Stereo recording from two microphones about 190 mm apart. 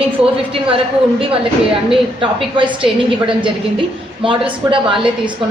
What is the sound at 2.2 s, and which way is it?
Speech, 25° right (ahead or behind).